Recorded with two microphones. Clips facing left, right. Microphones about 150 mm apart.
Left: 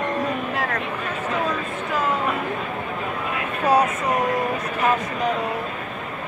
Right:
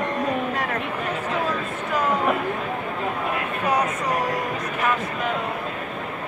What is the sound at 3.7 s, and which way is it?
Train, 25° left (ahead or behind).